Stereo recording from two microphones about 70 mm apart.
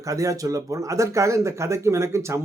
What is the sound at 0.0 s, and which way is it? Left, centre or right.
Speech, right.